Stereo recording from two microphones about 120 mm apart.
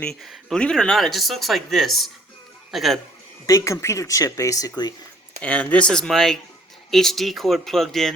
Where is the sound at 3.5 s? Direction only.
25° left (ahead or behind).